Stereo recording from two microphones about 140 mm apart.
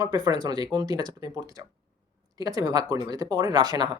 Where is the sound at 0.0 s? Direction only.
30° right (ahead or behind).